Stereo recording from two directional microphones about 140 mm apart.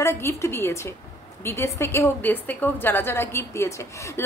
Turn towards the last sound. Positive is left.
turn(degrees=20)  # may be behind; listen again after turning